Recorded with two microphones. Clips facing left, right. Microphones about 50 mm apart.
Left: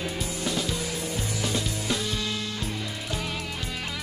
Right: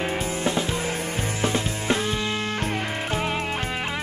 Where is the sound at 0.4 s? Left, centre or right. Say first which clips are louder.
Right 2 dB; right.